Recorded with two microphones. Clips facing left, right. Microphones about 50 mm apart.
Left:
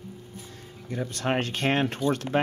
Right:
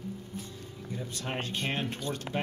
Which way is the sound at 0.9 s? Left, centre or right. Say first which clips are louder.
Left 9 dB; left.